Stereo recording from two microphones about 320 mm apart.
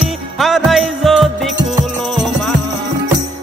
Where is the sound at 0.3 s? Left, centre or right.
Centre.